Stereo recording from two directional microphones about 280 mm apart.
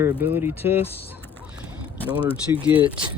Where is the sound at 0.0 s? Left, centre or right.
Centre.